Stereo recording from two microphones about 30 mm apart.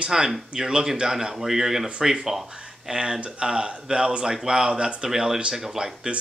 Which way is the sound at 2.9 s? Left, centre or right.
Right.